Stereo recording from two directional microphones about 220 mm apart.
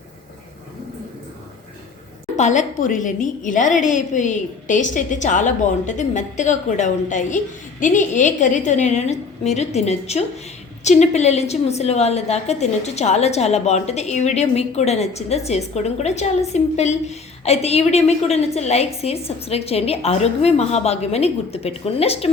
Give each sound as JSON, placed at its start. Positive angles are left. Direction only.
{"t": 2.3, "sound": "a woman's voice", "side_deg": 35}